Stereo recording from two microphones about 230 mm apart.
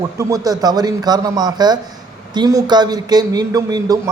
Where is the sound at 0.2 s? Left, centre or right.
Centre.